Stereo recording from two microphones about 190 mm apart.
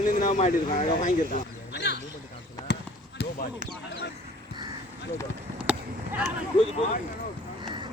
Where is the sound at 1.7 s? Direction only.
65° left (ahead or behind).